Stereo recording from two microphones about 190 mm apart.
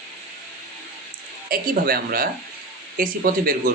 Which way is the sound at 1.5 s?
50° right (ahead or behind).